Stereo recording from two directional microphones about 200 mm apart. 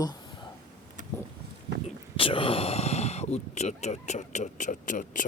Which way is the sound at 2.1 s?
25° left (ahead or behind).